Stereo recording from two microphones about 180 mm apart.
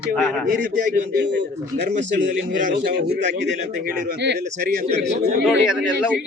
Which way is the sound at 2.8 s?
70° right (ahead or behind).